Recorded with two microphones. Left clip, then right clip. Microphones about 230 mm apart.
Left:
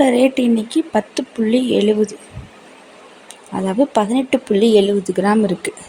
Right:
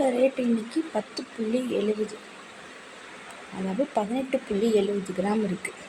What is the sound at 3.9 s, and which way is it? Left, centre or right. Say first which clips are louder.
Speech: left 10 dB; left.